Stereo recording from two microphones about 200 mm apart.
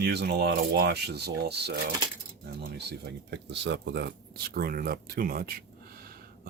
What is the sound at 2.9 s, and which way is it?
Speech, 55° right (ahead or behind).